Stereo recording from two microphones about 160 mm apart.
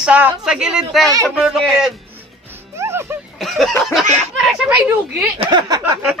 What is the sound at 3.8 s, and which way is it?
Speech, centre (ahead or behind).